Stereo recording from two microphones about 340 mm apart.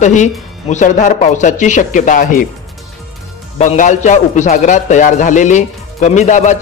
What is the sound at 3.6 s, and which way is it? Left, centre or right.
A man's voice, left.